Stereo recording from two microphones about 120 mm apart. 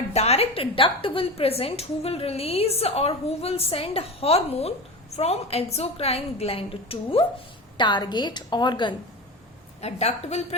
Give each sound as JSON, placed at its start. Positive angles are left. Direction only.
{"t": 0.1, "sound": "a woman's voice", "side_deg": 60}
{"t": 7.8, "sound": "a woman's voice", "side_deg": 40}
{"t": 9.8, "sound": "a woman's voice", "side_deg": 65}